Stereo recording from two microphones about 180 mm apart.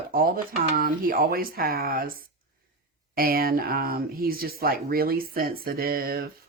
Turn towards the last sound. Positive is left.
turn(degrees=-55)  # may be behind; listen again after turning